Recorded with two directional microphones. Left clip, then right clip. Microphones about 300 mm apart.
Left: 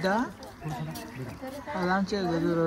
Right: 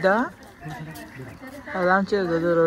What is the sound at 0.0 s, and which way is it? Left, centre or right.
Speech, centre.